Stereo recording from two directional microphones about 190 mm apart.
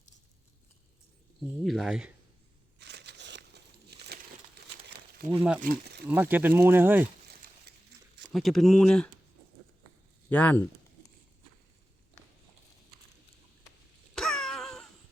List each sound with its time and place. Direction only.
1.6 s speech: centre (ahead or behind)
2.7 s a sound: 65° right (ahead or behind)
5.3 s speech: 5° right (ahead or behind)
5.5 s speech: 50° right (ahead or behind)
6.1 s speech: 10° right (ahead or behind)
7.4 s a sound: 50° right (ahead or behind)
8.3 s speech: centre (ahead or behind)
10.2 s speech: 10° left (ahead or behind)
14.2 s a sound: 5° left (ahead or behind)